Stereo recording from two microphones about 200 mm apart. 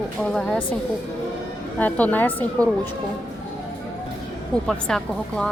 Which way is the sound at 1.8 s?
5° left (ahead or behind).